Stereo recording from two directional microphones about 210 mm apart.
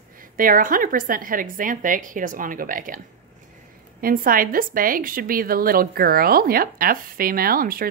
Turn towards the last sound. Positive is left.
turn(degrees=-45)  # may be behind; listen again after turning